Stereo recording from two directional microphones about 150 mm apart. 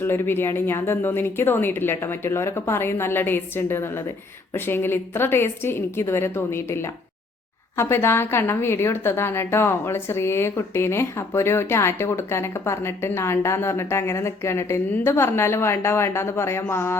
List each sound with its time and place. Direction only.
0.0 s a woman's voice: 15° left (ahead or behind)